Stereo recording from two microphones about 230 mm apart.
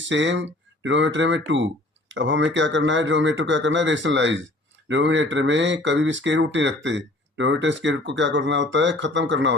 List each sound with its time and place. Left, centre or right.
0.0 s speech: right